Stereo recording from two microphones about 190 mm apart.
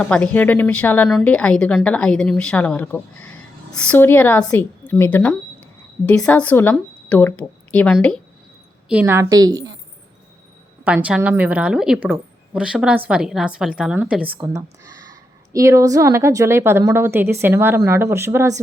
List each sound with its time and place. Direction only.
0.0 s a woman's voice: 5° left (ahead or behind)
8.9 s a woman's voice: 10° right (ahead or behind)
10.8 s a woman's voice: 5° right (ahead or behind)